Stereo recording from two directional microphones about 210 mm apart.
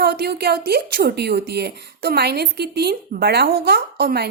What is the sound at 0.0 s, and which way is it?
A woman's voice, 50° right (ahead or behind).